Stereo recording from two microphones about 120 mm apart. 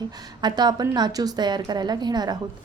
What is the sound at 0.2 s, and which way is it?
A woman's voice, 35° right (ahead or behind).